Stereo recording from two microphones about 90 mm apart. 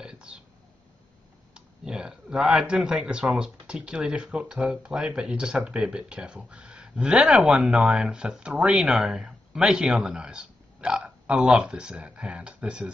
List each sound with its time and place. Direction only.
0.0 s burping: 10° right (ahead or behind)
1.5 s speech: 10° right (ahead or behind)